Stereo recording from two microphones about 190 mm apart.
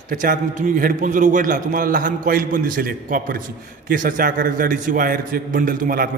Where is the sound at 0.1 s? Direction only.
45° right (ahead or behind).